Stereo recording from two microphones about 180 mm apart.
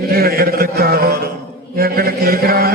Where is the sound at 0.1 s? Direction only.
60° right (ahead or behind).